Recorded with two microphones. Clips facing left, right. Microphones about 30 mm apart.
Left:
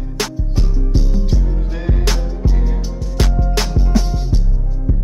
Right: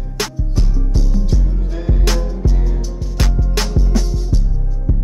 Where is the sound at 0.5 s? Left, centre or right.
Centre.